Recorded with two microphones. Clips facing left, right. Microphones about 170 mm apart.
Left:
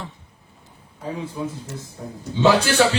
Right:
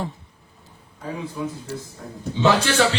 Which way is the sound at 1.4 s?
25° left (ahead or behind).